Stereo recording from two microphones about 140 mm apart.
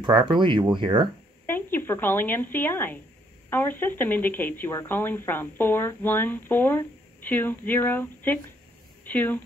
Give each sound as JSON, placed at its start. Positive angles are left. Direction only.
{"t": 0.0, "sound": "speech", "side_deg": -35}
{"t": 1.4, "sound": "speech", "side_deg": 15}